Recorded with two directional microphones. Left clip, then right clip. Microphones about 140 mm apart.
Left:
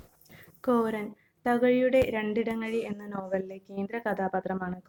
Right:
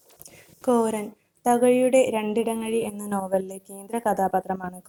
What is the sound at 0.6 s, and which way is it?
A woman's voice, 25° right (ahead or behind).